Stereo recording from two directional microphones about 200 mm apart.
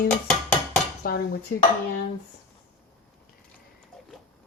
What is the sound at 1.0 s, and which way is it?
Speech, 45° left (ahead or behind).